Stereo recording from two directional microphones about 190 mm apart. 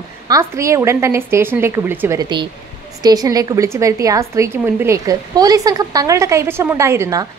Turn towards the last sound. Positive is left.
turn(degrees=-15)  # may be behind; listen again after turning